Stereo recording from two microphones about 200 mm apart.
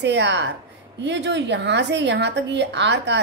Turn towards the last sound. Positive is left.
turn(degrees=-60)  # may be behind; listen again after turning